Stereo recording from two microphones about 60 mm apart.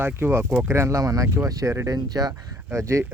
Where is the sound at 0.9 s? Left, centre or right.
Right.